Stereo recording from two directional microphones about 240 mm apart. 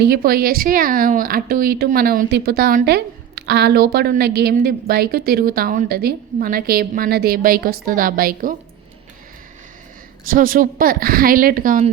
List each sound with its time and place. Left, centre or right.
0.0 s speech: right
10.2 s speech: right